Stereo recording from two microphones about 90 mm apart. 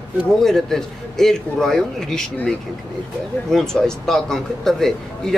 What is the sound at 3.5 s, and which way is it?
A man's voice, 5° left (ahead or behind).